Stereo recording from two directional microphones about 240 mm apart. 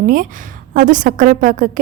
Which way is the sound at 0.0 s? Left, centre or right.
Right.